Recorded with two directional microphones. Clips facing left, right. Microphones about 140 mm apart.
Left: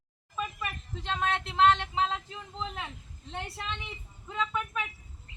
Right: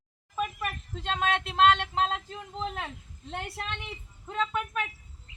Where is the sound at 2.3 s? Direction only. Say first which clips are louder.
Right 3 dB; 50° right (ahead or behind).